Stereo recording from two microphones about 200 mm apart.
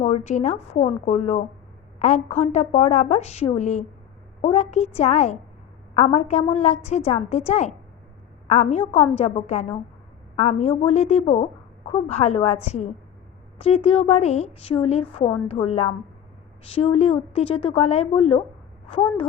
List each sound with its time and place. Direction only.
0.0 s a woman's voice: 35° left (ahead or behind)